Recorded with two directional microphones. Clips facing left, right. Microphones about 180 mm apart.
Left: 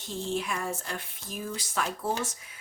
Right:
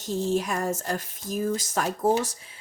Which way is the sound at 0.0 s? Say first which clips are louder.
Right 6 dB; 40° right (ahead or behind).